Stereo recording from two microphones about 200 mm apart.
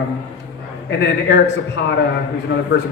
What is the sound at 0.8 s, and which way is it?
Speech, 60° left (ahead or behind).